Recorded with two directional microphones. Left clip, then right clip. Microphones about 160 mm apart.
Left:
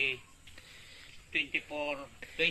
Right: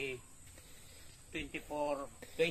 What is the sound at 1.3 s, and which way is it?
Speech, 70° right (ahead or behind).